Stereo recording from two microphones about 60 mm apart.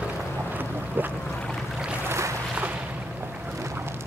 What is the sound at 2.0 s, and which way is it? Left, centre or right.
Boat, right.